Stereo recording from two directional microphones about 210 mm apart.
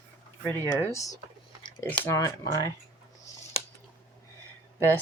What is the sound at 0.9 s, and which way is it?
Speech, 15° left (ahead or behind).